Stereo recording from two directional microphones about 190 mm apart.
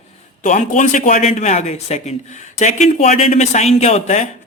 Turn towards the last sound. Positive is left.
turn(degrees=35)  # may be behind; listen again after turning